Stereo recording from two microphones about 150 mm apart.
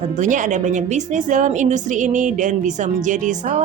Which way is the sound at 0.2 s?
55° right (ahead or behind).